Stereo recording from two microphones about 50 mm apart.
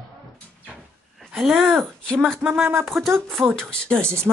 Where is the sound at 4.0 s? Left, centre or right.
Right.